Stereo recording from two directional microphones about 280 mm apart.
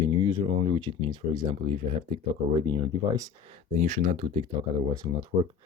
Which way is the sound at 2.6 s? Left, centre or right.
Centre.